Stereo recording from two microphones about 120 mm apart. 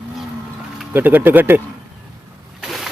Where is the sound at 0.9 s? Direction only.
15° right (ahead or behind).